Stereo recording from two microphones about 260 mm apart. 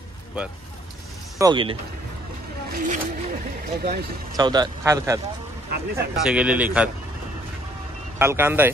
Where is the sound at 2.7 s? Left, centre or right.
Right.